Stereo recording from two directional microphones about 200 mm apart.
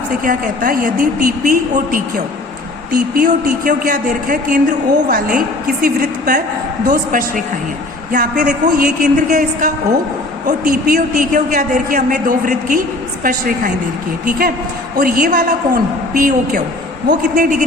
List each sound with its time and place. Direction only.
0.2 s a man's voice: 45° right (ahead or behind)